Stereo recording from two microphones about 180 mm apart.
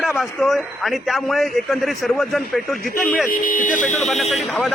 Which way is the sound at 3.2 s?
50° left (ahead or behind).